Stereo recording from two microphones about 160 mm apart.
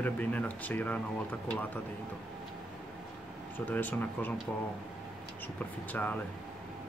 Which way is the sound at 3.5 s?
10° left (ahead or behind).